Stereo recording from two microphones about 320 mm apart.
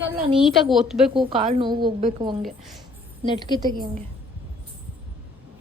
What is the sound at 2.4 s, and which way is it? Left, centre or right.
Speech, centre.